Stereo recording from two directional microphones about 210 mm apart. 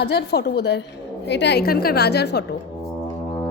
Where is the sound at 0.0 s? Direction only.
50° left (ahead or behind).